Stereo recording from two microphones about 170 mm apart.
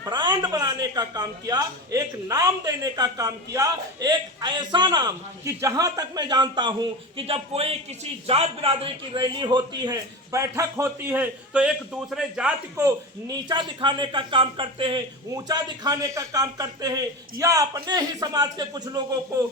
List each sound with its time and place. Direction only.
0.0 s a man's voice: 25° right (ahead or behind); by 12.8 s 5° right (ahead or behind)
12.8 s a man's voice: 20° right (ahead or behind)